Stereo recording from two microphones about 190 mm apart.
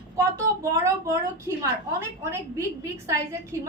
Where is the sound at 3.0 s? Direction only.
15° right (ahead or behind).